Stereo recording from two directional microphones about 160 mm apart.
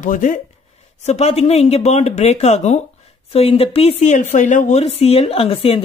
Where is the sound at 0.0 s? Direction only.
55° left (ahead or behind).